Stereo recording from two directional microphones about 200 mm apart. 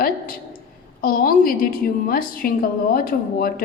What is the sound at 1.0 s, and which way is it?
A woman's voice, 45° left (ahead or behind).